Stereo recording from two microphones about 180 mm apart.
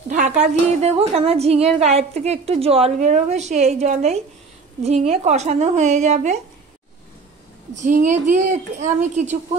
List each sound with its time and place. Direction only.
0.1 s a sound: 40° right (ahead or behind)
0.8 s a woman's voice: 35° right (ahead or behind)
7.7 s a woman's voice: 45° right (ahead or behind)